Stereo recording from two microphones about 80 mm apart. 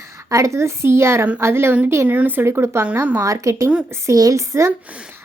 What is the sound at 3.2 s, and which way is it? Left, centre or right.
A woman's voice, right.